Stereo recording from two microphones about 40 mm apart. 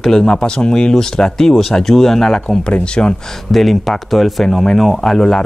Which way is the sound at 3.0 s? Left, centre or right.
Left.